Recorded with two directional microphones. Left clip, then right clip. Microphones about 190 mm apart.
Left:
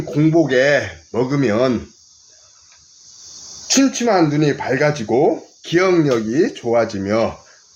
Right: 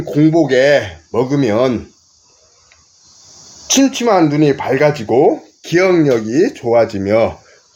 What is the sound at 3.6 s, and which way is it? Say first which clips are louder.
Speech: right 3 dB; 30° right (ahead or behind).